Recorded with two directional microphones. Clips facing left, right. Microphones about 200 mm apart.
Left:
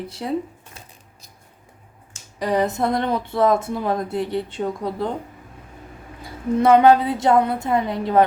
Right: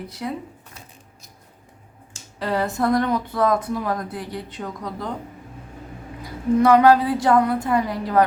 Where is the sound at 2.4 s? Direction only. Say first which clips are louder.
Left 2 dB; 15° left (ahead or behind).